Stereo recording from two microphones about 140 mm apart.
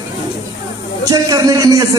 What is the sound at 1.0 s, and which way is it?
Speech, 25° right (ahead or behind).